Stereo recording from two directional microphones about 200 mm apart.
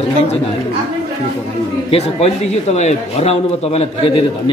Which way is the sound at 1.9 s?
30° left (ahead or behind).